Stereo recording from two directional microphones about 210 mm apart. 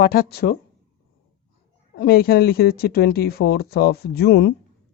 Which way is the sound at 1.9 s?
50° left (ahead or behind).